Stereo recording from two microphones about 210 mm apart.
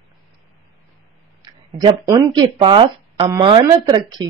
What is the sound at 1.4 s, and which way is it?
Speech, 20° right (ahead or behind).